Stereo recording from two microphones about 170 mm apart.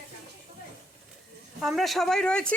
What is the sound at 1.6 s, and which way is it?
Speech, centre (ahead or behind).